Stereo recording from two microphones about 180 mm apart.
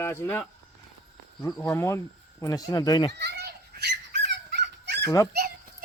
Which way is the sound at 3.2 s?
65° right (ahead or behind).